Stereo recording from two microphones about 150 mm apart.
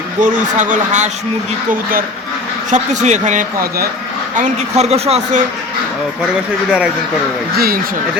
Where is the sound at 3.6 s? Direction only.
90° right.